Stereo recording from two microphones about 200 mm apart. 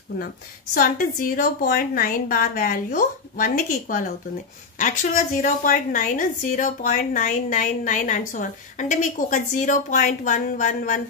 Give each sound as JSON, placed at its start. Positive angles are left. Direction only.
{"t": 0.7, "sound": "a woman's voice", "side_deg": 45}
{"t": 4.7, "sound": "a woman's voice", "side_deg": 40}